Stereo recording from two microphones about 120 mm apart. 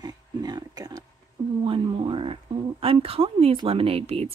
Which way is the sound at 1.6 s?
45° right (ahead or behind).